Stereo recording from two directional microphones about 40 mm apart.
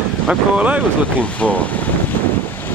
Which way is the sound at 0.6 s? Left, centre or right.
Right.